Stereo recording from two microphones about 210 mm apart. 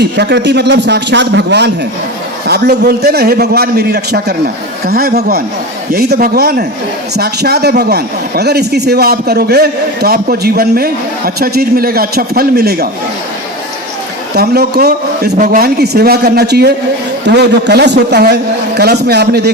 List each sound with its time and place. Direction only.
0.0 s a man's voice: 55° right (ahead or behind)
14.3 s speech: 50° right (ahead or behind)